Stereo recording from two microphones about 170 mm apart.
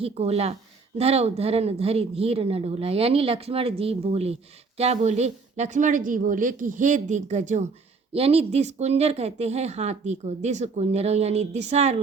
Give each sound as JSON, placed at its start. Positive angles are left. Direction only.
{"t": 0.0, "sound": "a woman's voice", "side_deg": -35}